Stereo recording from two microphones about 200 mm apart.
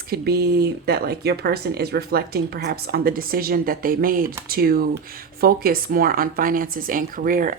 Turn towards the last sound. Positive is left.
turn(degrees=-45)  # may be behind; listen again after turning